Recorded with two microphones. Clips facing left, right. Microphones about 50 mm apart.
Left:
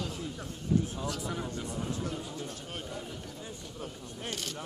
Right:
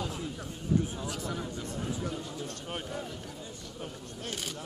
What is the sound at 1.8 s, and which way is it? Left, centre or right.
Speech, centre.